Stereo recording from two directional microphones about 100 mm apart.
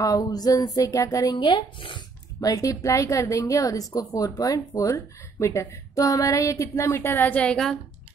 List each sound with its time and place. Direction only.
0.0 s a woman's voice: 35° left (ahead or behind)
1.4 s speech: 50° left (ahead or behind)
2.4 s a woman's voice: 35° left (ahead or behind)
7.3 s a woman's voice: 5° left (ahead or behind)